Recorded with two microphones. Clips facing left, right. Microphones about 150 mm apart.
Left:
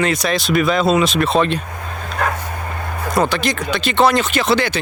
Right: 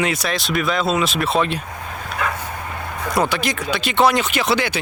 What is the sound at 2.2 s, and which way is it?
Dog, 45° left (ahead or behind).